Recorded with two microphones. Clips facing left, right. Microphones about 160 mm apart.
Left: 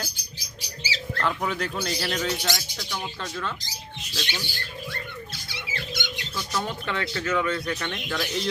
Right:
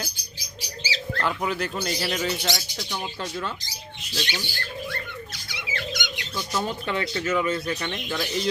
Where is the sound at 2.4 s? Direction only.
20° right (ahead or behind).